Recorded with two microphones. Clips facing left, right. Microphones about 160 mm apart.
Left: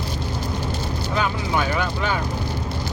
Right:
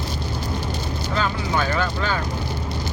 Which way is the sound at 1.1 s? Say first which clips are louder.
Even; 10° left (ahead or behind).